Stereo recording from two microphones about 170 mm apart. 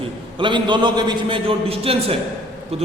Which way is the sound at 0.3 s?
30° right (ahead or behind).